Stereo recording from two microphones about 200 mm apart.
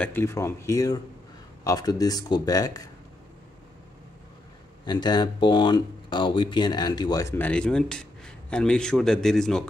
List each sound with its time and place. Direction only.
0.0 s speech: 10° left (ahead or behind)
4.8 s speech: 20° left (ahead or behind); by 9.7 s centre (ahead or behind)